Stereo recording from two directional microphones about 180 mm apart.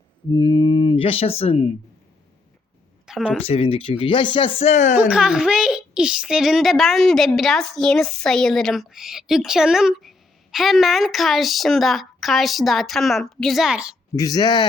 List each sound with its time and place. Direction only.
0.3 s speech: 25° left (ahead or behind)
3.1 s speech: centre (ahead or behind)
3.4 s speech: 35° left (ahead or behind)
4.9 s a woman's voice: 5° right (ahead or behind)
14.2 s speech: 20° left (ahead or behind)